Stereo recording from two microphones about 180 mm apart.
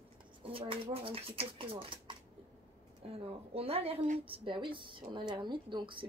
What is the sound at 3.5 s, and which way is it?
A woman's voice, 35° right (ahead or behind).